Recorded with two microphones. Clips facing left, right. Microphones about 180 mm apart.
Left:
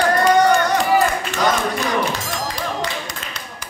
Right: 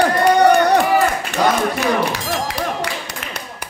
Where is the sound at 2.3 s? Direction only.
65° right (ahead or behind).